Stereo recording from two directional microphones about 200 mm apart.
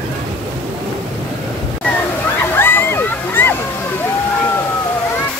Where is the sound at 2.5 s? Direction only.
10° left (ahead or behind).